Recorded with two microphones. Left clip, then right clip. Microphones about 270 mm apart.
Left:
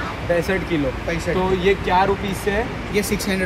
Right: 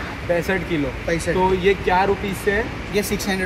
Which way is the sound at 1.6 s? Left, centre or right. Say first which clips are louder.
Left 3 dB; centre.